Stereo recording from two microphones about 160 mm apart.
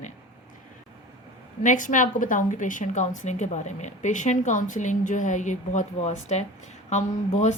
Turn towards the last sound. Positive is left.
turn(degrees=45)  # may be behind; listen again after turning